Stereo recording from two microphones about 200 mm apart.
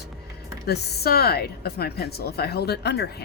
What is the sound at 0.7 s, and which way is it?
Speech, 50° left (ahead or behind).